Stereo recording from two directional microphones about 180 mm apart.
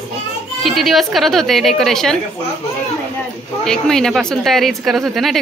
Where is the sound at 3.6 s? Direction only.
5° left (ahead or behind).